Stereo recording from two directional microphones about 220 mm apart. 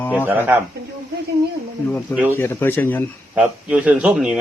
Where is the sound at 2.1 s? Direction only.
10° right (ahead or behind).